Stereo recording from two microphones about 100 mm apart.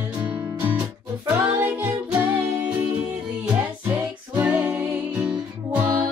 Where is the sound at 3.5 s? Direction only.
15° right (ahead or behind).